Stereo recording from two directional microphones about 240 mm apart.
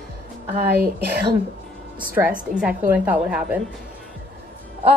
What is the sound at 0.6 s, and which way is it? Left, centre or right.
Speech, right.